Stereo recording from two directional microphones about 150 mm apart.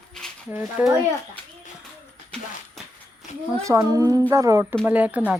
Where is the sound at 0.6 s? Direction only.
Centre (ahead or behind).